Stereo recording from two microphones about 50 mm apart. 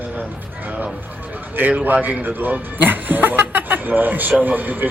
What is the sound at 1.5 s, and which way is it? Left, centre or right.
A man's voice, right.